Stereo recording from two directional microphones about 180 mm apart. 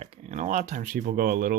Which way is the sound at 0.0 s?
40° right (ahead or behind).